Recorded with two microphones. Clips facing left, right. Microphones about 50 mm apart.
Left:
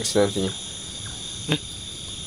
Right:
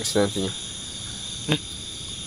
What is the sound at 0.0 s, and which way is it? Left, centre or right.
Speech, centre.